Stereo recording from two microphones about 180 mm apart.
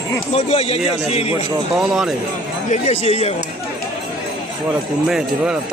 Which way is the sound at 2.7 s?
40° left (ahead or behind).